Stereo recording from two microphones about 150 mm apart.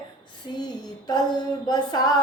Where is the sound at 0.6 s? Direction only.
25° left (ahead or behind).